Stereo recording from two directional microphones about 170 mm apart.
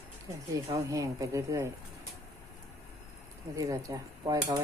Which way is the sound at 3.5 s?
20° right (ahead or behind).